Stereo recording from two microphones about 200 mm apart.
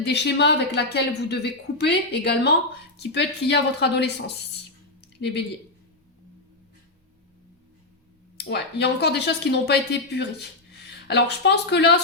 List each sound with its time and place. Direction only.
0.0 s a woman's voice: 60° left (ahead or behind)
4.9 s a sound: 60° left (ahead or behind)
8.4 s a woman's voice: 55° left (ahead or behind)